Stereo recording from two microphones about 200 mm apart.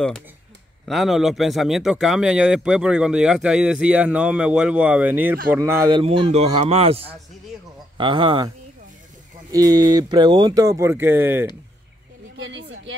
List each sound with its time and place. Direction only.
0.8 s speech: centre (ahead or behind); by 8.5 s 25° right (ahead or behind)
9.5 s speech: 20° right (ahead or behind)
12.4 s a woman's voice: 70° right (ahead or behind)